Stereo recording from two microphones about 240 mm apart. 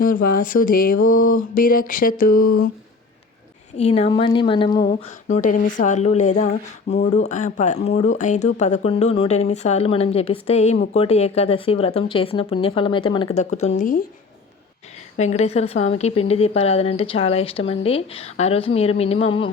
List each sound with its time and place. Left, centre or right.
0.0 s a sound: left
3.8 s speech: left
4.9 s speech: left
15.1 s speech: left